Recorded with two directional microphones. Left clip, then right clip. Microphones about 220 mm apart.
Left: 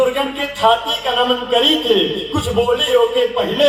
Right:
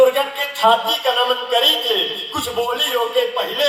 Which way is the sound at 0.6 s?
30° right (ahead or behind).